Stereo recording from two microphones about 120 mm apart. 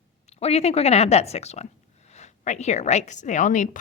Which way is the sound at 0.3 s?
60° left (ahead or behind).